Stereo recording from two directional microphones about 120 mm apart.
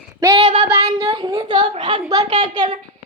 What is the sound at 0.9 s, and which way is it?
A child's voice, 35° right (ahead or behind).